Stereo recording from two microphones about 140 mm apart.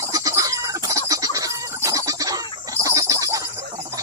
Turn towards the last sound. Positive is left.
turn(degrees=-25)  # may be behind; listen again after turning